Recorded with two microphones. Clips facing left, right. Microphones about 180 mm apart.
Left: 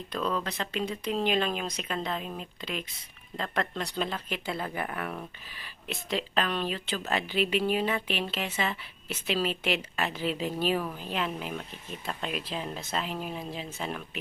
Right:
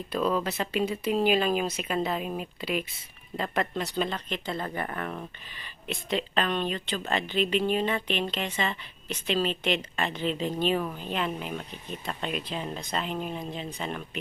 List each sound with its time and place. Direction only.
0.1 s speech: 5° right (ahead or behind)